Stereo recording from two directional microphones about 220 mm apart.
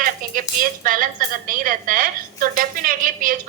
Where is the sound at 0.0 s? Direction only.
40° right (ahead or behind).